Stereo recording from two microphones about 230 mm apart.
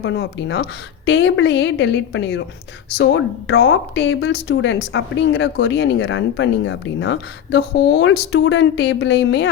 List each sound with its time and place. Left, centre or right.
0.0 s speech: left